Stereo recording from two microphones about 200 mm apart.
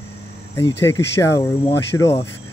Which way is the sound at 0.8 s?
15° left (ahead or behind).